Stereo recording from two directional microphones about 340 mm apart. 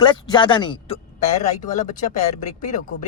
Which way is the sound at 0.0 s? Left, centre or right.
Centre.